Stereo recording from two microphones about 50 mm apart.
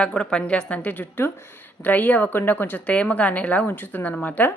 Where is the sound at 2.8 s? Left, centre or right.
Left.